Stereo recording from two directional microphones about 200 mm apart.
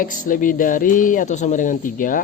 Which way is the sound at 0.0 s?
40° left (ahead or behind).